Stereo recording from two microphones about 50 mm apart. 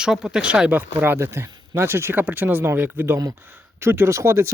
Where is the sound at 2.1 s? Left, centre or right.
Right.